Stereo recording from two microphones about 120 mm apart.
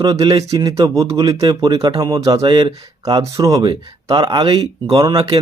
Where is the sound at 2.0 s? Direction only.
30° right (ahead or behind).